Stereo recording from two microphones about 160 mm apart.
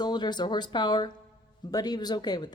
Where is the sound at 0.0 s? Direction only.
25° left (ahead or behind).